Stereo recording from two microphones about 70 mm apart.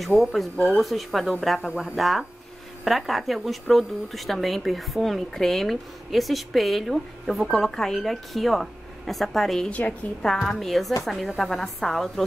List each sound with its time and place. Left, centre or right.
0.0 s a woman's voice: centre
1.7 s speech: centre
2.0 s a woman's voice: centre
9.7 s a woman's voice: centre
10.2 s a woman's voice: centre